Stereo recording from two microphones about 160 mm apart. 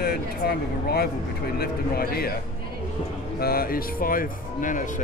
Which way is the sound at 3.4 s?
70° left (ahead or behind).